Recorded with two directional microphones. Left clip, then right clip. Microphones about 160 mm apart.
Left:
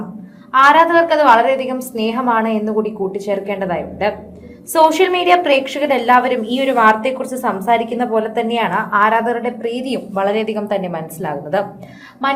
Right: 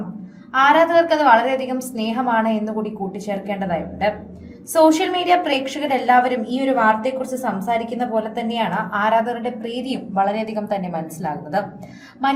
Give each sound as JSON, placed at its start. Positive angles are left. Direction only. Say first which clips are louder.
{"t": 0.5, "sound": "a woman's voice", "louder": "left 4 dB", "side_deg": 30}